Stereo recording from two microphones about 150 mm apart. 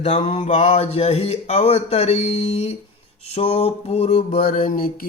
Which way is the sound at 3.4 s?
40° left (ahead or behind).